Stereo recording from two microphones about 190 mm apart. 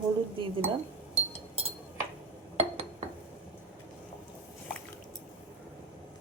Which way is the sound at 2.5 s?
35° right (ahead or behind).